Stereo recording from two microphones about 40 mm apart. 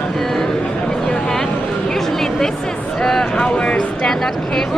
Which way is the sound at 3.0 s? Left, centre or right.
Centre.